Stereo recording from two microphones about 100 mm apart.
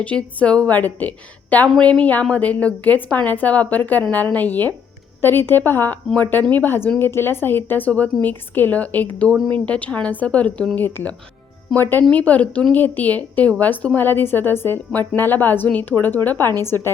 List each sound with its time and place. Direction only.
0.0 s a woman's voice: 15° left (ahead or behind)